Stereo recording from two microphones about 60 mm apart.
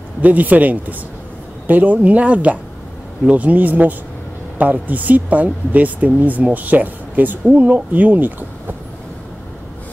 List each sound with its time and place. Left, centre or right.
0.2 s speech: right